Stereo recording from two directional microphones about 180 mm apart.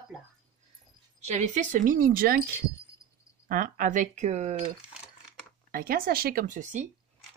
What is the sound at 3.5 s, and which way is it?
Speech, 50° right (ahead or behind).